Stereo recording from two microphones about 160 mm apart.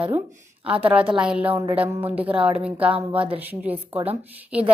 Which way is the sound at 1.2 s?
5° right (ahead or behind).